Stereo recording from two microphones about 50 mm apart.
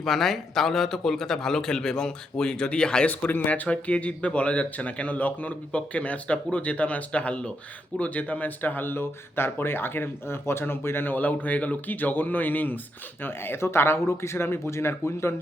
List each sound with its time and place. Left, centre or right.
0.0 s a man's voice: centre
3.1 s speech: left
13.2 s speech: left